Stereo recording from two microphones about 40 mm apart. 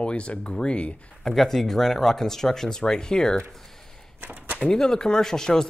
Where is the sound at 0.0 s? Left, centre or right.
Left.